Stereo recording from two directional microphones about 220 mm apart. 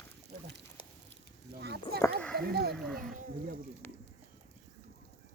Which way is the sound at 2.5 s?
45° right (ahead or behind).